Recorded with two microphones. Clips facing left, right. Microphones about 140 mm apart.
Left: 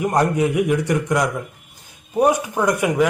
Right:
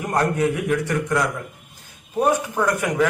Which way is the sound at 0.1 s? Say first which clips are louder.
Right 2 dB; 15° left (ahead or behind).